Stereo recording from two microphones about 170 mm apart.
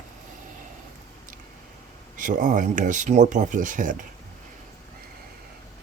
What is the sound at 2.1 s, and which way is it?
Speech, 50° right (ahead or behind).